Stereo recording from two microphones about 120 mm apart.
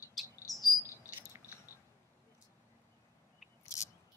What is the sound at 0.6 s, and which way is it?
Chirp, 25° left (ahead or behind).